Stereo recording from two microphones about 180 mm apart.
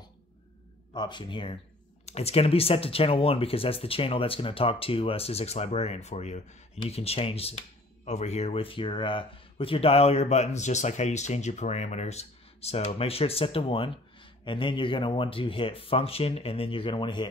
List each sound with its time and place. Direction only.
0.9 s speech: 25° left (ahead or behind)